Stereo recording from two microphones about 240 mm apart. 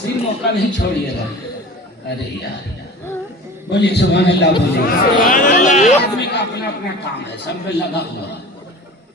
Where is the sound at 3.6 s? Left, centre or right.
Left.